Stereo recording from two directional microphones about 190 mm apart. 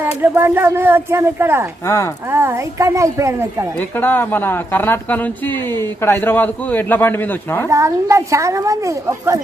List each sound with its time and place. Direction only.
0.0 s speech: 10° right (ahead or behind)
3.8 s a man's voice: 10° left (ahead or behind)
7.7 s speech: 15° right (ahead or behind)